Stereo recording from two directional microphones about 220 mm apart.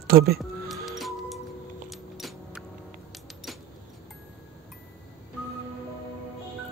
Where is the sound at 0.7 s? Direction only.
Centre (ahead or behind).